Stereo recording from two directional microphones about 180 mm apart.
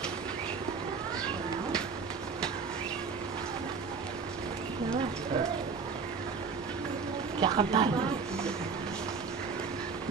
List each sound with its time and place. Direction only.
7.3 s speech: 25° right (ahead or behind)